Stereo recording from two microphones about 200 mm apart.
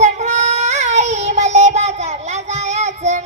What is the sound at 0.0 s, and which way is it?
Child singing, 35° right (ahead or behind).